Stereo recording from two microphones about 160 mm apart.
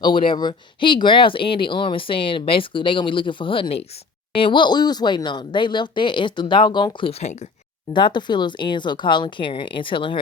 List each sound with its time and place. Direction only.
0.0 s speech: 30° left (ahead or behind)
7.9 s speech: 30° left (ahead or behind)